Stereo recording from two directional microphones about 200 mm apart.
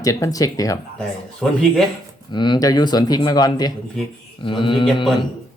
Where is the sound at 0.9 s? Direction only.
5° left (ahead or behind).